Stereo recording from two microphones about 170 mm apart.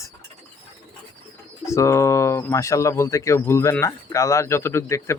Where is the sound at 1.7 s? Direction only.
15° left (ahead or behind).